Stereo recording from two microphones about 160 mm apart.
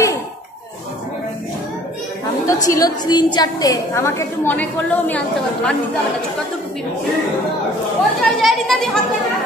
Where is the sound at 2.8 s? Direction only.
25° left (ahead or behind); by 5.8 s 5° left (ahead or behind).